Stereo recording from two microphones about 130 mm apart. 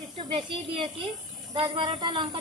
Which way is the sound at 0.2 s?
45° right (ahead or behind).